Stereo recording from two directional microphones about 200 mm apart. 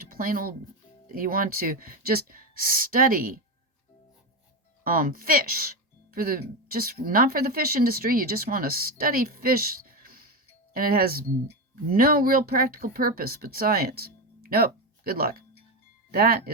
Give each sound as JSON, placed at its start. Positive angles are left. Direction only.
{"t": 0.1, "sound": "speech", "side_deg": -45}
{"t": 4.8, "sound": "speech", "side_deg": -45}